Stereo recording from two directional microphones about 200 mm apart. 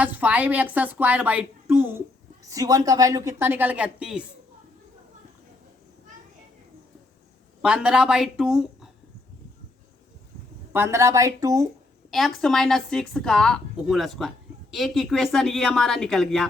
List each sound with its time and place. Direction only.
0.0 s a woman's voice: 10° right (ahead or behind)
7.6 s a woman's voice: 5° right (ahead or behind)
10.7 s a woman's voice: 10° right (ahead or behind)
12.1 s a woman's voice: centre (ahead or behind)